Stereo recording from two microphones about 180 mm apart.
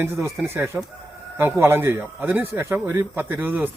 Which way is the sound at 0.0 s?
15° right (ahead or behind).